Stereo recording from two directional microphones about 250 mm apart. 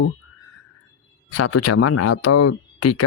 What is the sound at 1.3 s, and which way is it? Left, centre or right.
Speech, left.